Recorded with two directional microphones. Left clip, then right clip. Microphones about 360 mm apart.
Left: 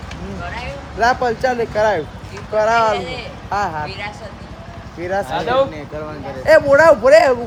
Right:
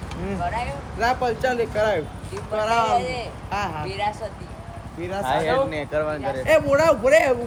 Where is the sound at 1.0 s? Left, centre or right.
Centre.